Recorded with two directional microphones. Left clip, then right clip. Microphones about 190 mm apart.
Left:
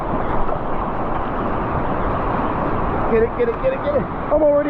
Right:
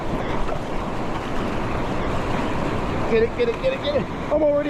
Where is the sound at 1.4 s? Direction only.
25° right (ahead or behind).